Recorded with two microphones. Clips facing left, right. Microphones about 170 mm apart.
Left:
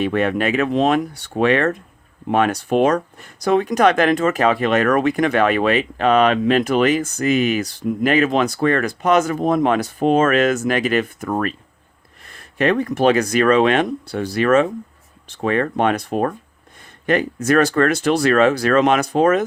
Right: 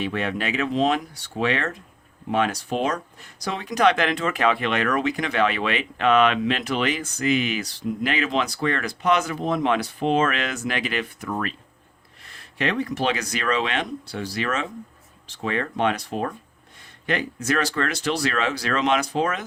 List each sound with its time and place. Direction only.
0.0 s speech: 55° left (ahead or behind)